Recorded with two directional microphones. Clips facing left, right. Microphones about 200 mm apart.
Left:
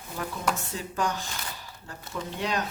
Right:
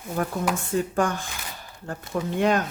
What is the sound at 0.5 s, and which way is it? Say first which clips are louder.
Speech: right 9 dB; 50° right (ahead or behind).